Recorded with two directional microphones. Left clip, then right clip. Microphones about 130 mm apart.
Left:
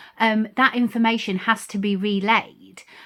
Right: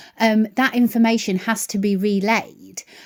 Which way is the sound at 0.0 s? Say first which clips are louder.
Right 2 dB; 40° right (ahead or behind).